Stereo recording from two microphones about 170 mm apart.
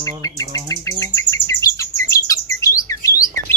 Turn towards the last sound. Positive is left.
turn(degrees=20)  # may be behind; listen again after turning